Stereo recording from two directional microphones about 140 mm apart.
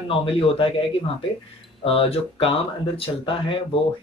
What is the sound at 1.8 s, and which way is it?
Speech, 45° left (ahead or behind).